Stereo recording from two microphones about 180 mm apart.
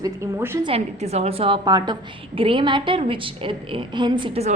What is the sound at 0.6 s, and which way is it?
A woman's voice, 35° right (ahead or behind).